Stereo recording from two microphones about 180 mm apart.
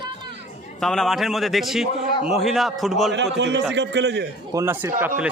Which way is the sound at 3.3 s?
80° right.